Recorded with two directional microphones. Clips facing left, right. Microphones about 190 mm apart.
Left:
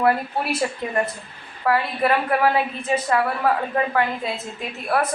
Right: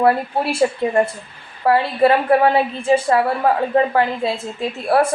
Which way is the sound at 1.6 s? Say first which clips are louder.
Right 6 dB; 30° right (ahead or behind).